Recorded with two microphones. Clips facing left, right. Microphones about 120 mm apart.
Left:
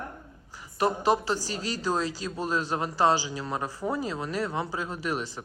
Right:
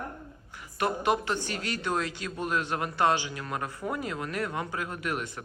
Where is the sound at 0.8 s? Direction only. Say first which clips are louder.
Left 3 dB; 30° left (ahead or behind).